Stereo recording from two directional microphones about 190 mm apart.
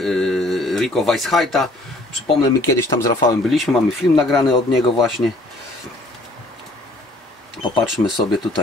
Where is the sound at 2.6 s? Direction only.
15° left (ahead or behind).